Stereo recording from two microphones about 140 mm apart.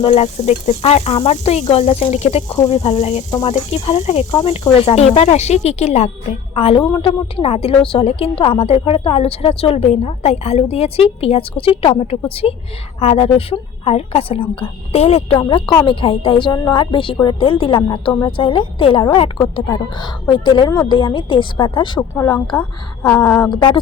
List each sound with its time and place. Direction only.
0.0 s a woman's voice: 45° left (ahead or behind)
6.5 s a woman's voice: 40° left (ahead or behind); by 22.4 s 25° left (ahead or behind)
23.0 s a sound: 10° left (ahead or behind)